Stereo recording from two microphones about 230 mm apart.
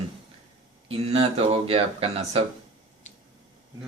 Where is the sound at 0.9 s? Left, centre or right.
Right.